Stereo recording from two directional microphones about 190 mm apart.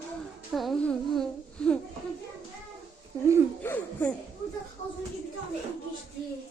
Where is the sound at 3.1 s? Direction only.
20° right (ahead or behind).